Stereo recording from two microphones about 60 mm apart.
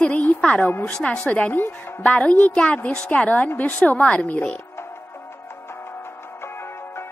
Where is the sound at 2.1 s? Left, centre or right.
Left.